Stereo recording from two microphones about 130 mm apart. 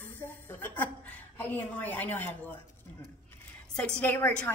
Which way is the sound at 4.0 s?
15° left (ahead or behind).